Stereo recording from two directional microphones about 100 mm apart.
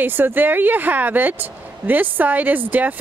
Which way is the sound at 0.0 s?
20° right (ahead or behind).